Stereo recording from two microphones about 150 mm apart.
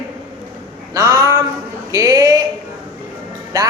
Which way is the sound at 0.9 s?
20° right (ahead or behind).